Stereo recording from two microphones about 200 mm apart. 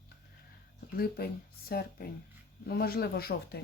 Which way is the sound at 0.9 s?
50° left (ahead or behind).